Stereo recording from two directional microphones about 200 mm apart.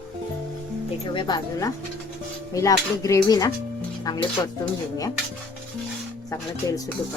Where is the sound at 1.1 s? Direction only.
20° left (ahead or behind).